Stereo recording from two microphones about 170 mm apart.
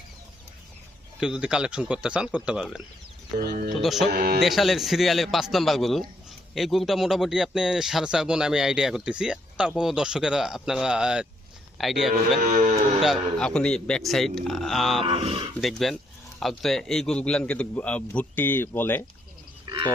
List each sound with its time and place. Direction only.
1.2 s speech: 5° right (ahead or behind)
3.3 s speech: 65° right (ahead or behind)
3.8 s speech: centre (ahead or behind)
4.1 s speech: 65° right (ahead or behind)
4.4 s speech: centre (ahead or behind)
12.4 s speech: 50° right (ahead or behind)
13.0 s speech: centre (ahead or behind)
15.0 s speech: 35° right (ahead or behind)
15.6 s a man's voice: centre (ahead or behind)
19.7 s livestock: 25° right (ahead or behind)